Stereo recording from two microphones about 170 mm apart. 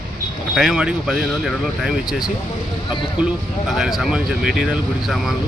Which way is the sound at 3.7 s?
Centre (ahead or behind).